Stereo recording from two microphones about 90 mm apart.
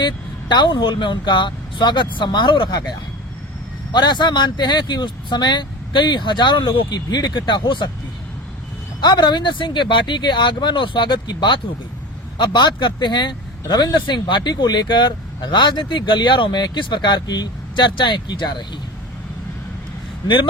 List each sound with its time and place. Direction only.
0.0 s speech: 55° left (ahead or behind)
3.9 s speech: 55° left (ahead or behind)
9.0 s speech: 55° left (ahead or behind)
20.2 s speech: 60° left (ahead or behind)